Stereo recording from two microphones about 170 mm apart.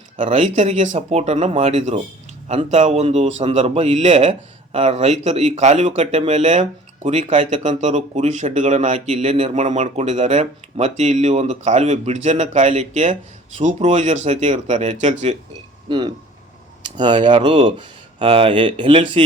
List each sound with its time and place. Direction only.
0.2 s a man's voice: 45° right (ahead or behind)
15.9 s a man's voice: 30° right (ahead or behind)